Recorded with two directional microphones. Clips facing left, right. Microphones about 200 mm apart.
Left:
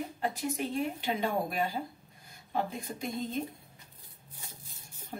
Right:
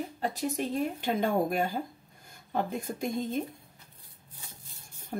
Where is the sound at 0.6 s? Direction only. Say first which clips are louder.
Right 2 dB; 45° right (ahead or behind).